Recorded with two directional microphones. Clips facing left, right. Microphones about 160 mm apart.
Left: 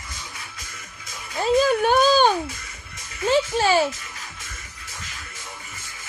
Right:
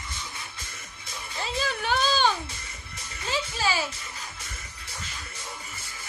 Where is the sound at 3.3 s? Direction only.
55° left (ahead or behind).